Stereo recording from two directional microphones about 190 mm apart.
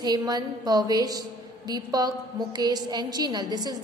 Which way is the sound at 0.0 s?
20° right (ahead or behind).